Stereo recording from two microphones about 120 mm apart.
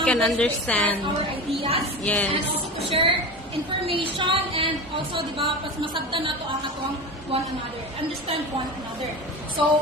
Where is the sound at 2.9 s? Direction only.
50° right (ahead or behind).